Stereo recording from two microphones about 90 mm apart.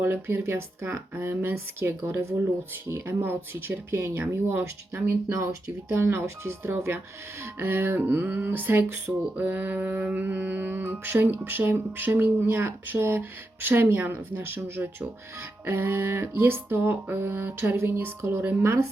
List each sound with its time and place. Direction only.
0.0 s speech: 25° right (ahead or behind)